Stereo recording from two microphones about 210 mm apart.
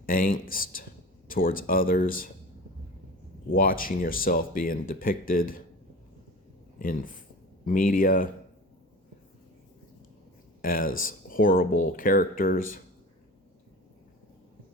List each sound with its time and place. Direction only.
0.0 s speech: 45° left (ahead or behind)
3.5 s speech: 45° left (ahead or behind)
6.7 s speech: 40° left (ahead or behind)
10.6 s speech: 45° left (ahead or behind)